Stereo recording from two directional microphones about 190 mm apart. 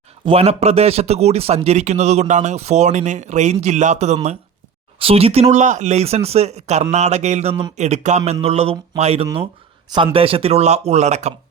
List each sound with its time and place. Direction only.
0.3 s speech: 30° right (ahead or behind)